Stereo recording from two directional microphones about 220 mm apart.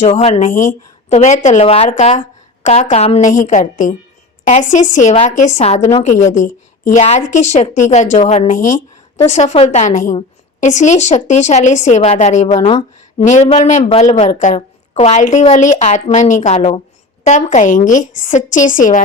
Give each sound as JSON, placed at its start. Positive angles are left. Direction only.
{"t": 0.0, "sound": "a woman's voice", "side_deg": 30}